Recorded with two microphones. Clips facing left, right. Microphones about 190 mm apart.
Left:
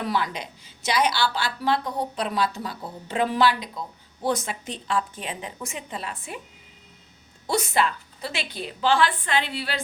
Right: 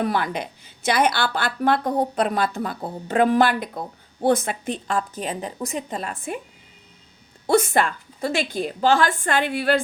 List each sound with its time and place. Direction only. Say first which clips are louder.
0.0 s speech: right 4 dB; 55° right (ahead or behind)
7.4 s speech: right 5 dB; 50° right (ahead or behind)